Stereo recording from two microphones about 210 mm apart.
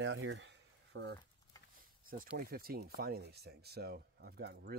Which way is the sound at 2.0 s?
45° right (ahead or behind).